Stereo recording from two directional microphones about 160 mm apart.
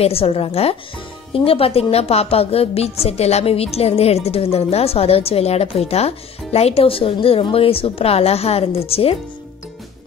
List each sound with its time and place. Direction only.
0.0 s a woman's voice: 35° left (ahead or behind)